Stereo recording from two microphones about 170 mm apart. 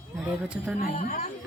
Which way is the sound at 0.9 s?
50° left (ahead or behind).